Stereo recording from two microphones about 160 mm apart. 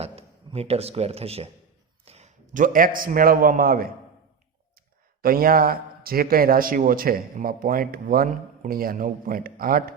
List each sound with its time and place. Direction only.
0.0 s a man's voice: 40° right (ahead or behind); by 3.9 s 65° right (ahead or behind)
5.2 s a man's voice: 65° right (ahead or behind)